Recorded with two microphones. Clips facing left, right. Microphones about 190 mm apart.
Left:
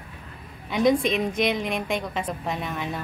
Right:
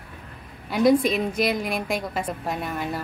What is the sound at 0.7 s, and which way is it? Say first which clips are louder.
A woman's voice: right 2 dB; 5° right (ahead or behind).